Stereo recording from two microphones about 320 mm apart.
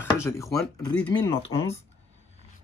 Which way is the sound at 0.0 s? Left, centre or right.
Centre.